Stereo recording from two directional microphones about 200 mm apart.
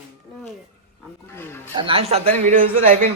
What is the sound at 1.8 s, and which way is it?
Speech, 30° right (ahead or behind).